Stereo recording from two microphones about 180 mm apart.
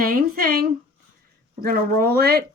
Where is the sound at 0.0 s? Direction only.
55° right (ahead or behind).